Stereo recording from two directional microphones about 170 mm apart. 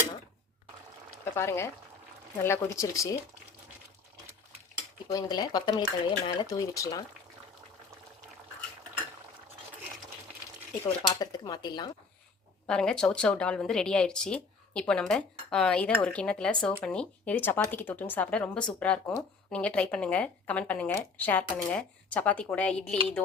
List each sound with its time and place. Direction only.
1.2 s a woman's voice: 15° left (ahead or behind)
5.1 s speech: 25° left (ahead or behind)
11.2 s speech: 25° left (ahead or behind)
12.6 s a woman's voice: 5° left (ahead or behind)